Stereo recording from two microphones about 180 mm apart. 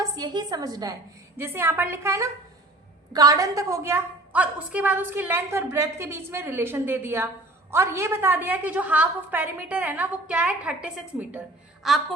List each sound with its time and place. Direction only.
0.0 s a woman's voice: 20° right (ahead or behind); by 12.0 s centre (ahead or behind)